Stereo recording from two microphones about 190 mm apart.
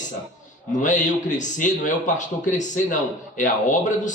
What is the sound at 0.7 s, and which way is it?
Speech, 40° left (ahead or behind).